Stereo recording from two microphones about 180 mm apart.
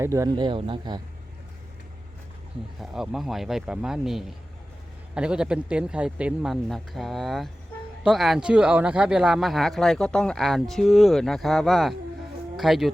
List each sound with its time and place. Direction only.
0.0 s speech: 15° right (ahead or behind)
2.8 s speech: 5° right (ahead or behind)